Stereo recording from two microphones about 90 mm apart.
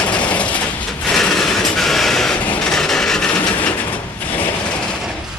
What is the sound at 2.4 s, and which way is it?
Vehicle, 15° left (ahead or behind).